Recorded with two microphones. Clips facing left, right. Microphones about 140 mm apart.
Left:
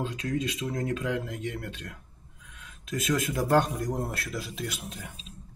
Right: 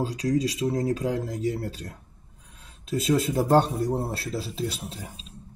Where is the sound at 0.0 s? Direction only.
35° right (ahead or behind).